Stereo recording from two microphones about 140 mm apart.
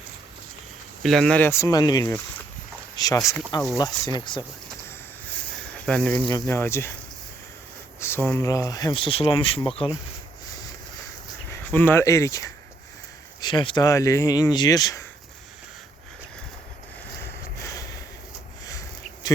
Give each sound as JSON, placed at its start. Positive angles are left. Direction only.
{"t": 1.0, "sound": "speech", "side_deg": 5}
{"t": 5.8, "sound": "speech", "side_deg": 5}
{"t": 7.9, "sound": "a sound", "side_deg": 15}
{"t": 8.4, "sound": "speech", "side_deg": 25}
{"t": 11.4, "sound": "speech", "side_deg": 15}
{"t": 13.4, "sound": "speech", "side_deg": 35}
{"t": 17.2, "sound": "a sound", "side_deg": 20}